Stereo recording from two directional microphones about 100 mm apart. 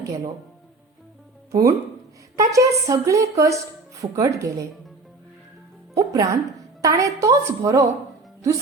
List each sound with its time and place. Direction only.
1.5 s a woman's voice: 35° right (ahead or behind)
5.9 s a woman's voice: 35° right (ahead or behind)